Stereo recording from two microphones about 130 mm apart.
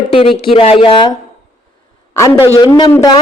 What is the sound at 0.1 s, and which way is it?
A man's voice, 45° left (ahead or behind).